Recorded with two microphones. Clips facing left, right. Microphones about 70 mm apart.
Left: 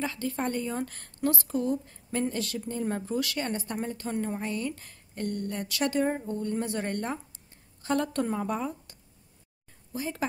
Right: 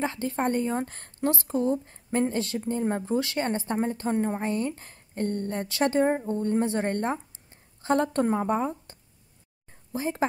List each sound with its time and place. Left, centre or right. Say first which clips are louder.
0.0 s a woman's voice: right 4 dB; right
9.9 s speech: right 4 dB; right